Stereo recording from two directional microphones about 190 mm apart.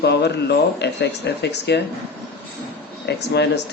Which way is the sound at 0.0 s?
60° left (ahead or behind).